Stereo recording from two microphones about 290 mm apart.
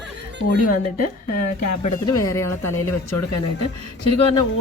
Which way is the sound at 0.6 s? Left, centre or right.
Left.